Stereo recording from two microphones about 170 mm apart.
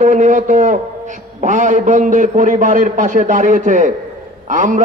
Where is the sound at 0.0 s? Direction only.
45° right (ahead or behind).